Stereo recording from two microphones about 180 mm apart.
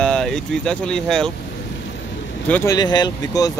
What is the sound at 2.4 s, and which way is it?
Speech, 10° left (ahead or behind).